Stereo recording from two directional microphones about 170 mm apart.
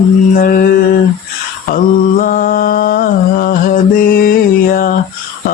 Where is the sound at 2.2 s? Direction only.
55° left (ahead or behind).